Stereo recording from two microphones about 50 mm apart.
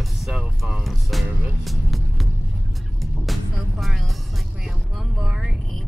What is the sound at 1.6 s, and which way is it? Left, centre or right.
Music, centre.